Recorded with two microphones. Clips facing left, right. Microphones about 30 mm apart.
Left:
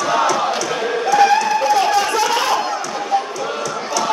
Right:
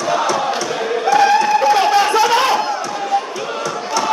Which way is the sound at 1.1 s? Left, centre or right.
Right.